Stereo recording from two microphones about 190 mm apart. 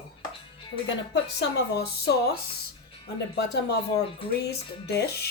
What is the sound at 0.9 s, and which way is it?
Speech, 65° left (ahead or behind).